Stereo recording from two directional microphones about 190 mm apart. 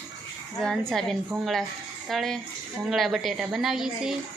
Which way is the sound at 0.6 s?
5° left (ahead or behind).